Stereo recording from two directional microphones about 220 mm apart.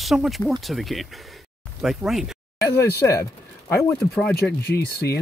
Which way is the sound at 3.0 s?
10° left (ahead or behind).